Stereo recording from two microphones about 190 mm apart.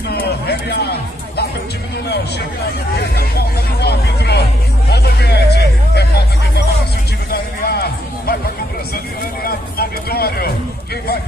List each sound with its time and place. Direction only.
0.1 s speech: 55° left (ahead or behind)
3.0 s hubbub: 55° left (ahead or behind)
7.6 s a sound: 55° left (ahead or behind)
8.9 s speech: 50° left (ahead or behind)